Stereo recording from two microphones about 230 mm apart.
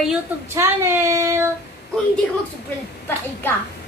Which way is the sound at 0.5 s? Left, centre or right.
Centre.